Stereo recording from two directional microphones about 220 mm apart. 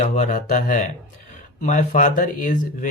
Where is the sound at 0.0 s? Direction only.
30° left (ahead or behind).